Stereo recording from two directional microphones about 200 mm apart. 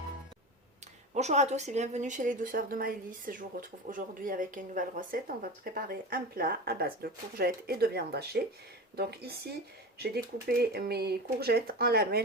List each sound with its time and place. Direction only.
1.1 s a woman's voice: 35° right (ahead or behind); by 9.6 s 55° right (ahead or behind)
10.6 s a woman's voice: 50° right (ahead or behind)